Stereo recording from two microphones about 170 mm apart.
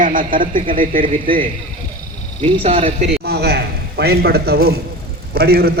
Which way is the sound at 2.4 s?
30° right (ahead or behind).